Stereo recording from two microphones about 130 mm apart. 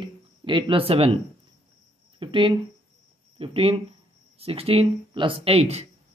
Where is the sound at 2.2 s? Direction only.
40° right (ahead or behind).